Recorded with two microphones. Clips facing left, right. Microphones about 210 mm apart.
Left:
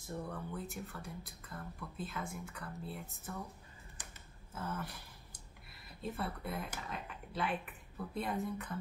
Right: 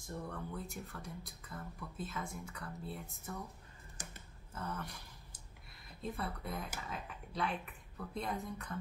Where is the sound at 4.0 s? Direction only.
45° right (ahead or behind).